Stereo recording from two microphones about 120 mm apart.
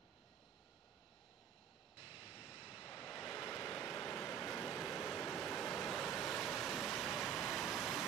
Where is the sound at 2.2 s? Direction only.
50° left (ahead or behind).